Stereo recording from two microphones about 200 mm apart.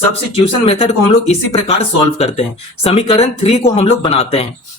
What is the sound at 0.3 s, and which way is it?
Speech, 30° left (ahead or behind).